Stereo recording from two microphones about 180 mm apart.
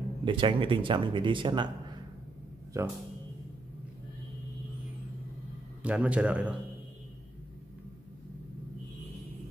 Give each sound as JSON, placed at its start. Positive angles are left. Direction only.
{"t": 0.2, "sound": "speech", "side_deg": -25}
{"t": 2.8, "sound": "a man's voice", "side_deg": -15}
{"t": 5.8, "sound": "a man's voice", "side_deg": -5}